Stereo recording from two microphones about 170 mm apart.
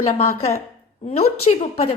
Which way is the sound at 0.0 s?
35° left (ahead or behind).